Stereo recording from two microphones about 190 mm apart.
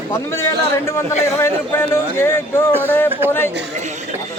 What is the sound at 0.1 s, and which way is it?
A man's voice, 15° left (ahead or behind).